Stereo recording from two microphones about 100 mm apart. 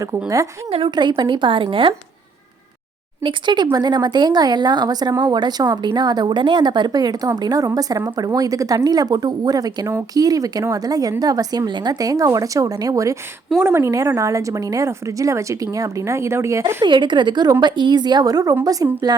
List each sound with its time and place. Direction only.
0.9 s speech: 45° right (ahead or behind)
3.2 s speech: 50° right (ahead or behind); by 16.7 s 30° right (ahead or behind)
16.8 s speech: 50° right (ahead or behind)